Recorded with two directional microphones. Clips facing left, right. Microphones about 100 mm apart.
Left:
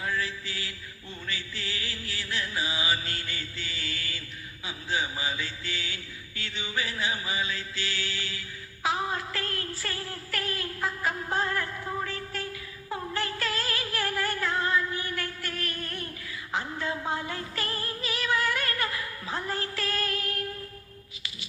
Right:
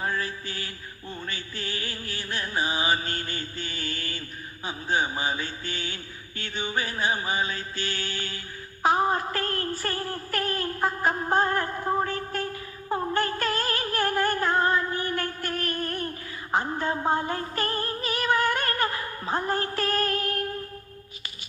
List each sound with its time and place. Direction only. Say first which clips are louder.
0.0 s mantra: right 2 dB; 45° right (ahead or behind)
1.3 s music: left 1 dB; 45° right (ahead or behind)
4.6 s mantra: right 5 dB; 45° right (ahead or behind)